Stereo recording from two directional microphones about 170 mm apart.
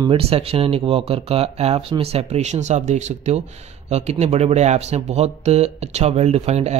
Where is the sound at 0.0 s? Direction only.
35° right (ahead or behind).